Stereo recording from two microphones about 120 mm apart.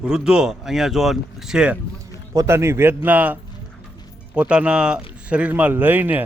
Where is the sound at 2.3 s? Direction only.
25° right (ahead or behind).